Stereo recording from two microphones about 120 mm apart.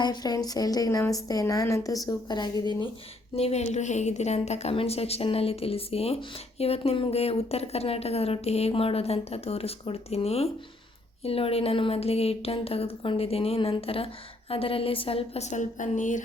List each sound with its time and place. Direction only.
0.0 s a woman's voice: 35° left (ahead or behind)
3.3 s a woman's voice: 60° left (ahead or behind); by 16.2 s 90° left